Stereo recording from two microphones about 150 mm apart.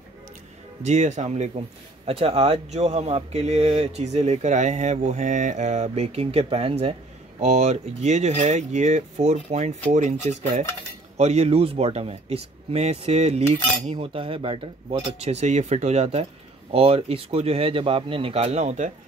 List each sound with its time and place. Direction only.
0.8 s speech: 50° right (ahead or behind)
11.1 s speech: 45° right (ahead or behind)